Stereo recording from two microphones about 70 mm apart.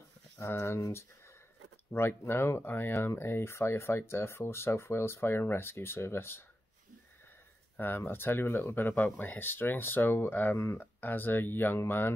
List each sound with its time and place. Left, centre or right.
0.4 s speech: left
1.9 s speech: left
7.7 s speech: left